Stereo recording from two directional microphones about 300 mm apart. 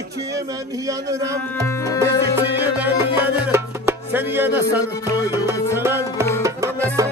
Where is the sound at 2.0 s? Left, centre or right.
Centre.